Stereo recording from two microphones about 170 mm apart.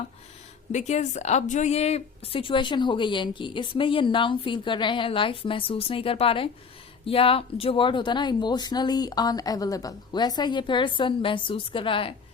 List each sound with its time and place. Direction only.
0.7 s a woman's voice: 45° left (ahead or behind)